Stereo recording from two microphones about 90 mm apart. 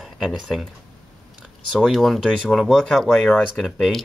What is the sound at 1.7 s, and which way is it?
Speech, 5° right (ahead or behind).